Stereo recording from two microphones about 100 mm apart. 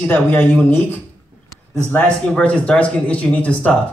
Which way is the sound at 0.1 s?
20° left (ahead or behind).